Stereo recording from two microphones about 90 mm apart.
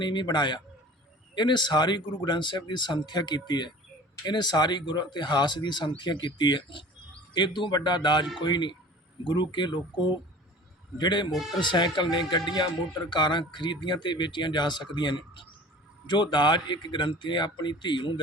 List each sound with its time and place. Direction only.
0.0 s speech: 60° left (ahead or behind)
11.3 s speech: centre (ahead or behind)
11.6 s speech: 60° left (ahead or behind)